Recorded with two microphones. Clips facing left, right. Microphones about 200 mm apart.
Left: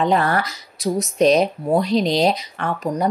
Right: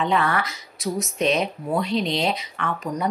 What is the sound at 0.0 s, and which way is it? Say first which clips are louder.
Speech: left 4 dB; 40° left (ahead or behind).